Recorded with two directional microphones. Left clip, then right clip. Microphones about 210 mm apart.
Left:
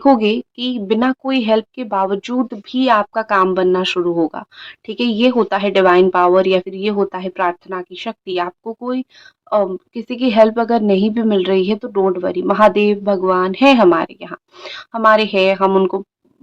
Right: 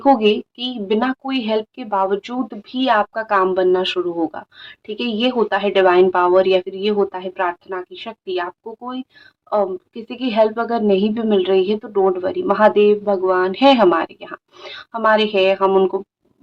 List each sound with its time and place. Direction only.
0.0 s a woman's voice: 30° left (ahead or behind)